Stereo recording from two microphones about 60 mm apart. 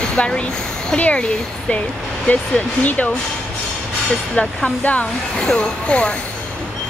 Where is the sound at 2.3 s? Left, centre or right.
Left.